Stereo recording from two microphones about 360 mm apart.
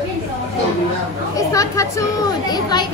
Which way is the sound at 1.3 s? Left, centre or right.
Centre.